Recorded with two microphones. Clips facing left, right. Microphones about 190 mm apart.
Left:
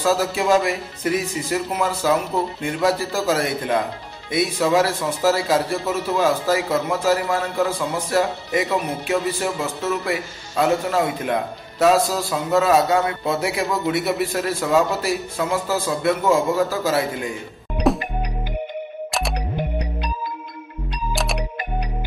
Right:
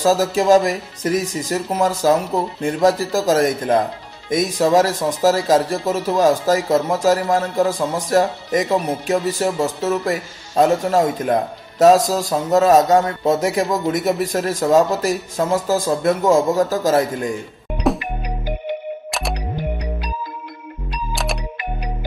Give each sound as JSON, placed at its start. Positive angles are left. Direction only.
{"t": 0.0, "sound": "speech", "side_deg": -40}
{"t": 21.1, "sound": "music", "side_deg": 0}